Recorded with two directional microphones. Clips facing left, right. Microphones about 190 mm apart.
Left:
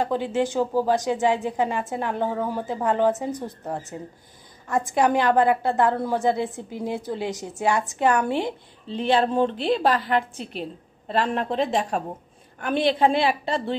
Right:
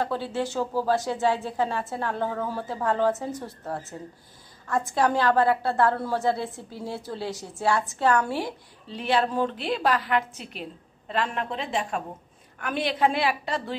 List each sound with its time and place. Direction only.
0.0 s a woman's voice: 15° left (ahead or behind)